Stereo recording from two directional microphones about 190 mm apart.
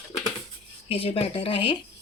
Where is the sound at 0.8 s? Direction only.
30° left (ahead or behind).